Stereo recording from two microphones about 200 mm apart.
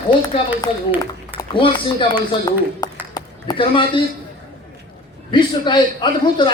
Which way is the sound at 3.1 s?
20° left (ahead or behind).